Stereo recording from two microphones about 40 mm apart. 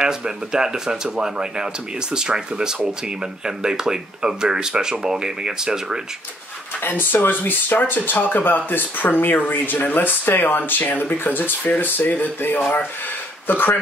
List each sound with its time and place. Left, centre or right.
0.0 s speech: centre
6.8 s speech: left